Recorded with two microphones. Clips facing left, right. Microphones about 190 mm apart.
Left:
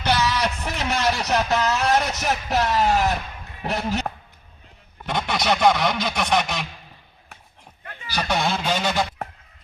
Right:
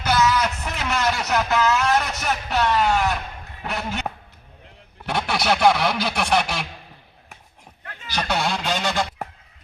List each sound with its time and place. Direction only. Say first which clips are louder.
0.0 s a man's voice: right 2 dB; 30° left (ahead or behind)
5.0 s speech: right 1 dB; 5° right (ahead or behind)
8.0 s a sound: even; 10° left (ahead or behind)
8.5 s speech: left 1 dB; 10° left (ahead or behind)